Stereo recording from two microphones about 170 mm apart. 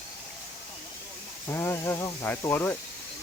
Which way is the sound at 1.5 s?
15° left (ahead or behind).